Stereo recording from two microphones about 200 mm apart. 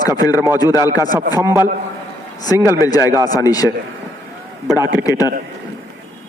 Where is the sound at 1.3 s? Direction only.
10° right (ahead or behind).